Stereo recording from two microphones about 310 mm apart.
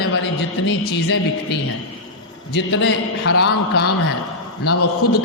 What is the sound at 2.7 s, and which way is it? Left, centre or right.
Speech, left.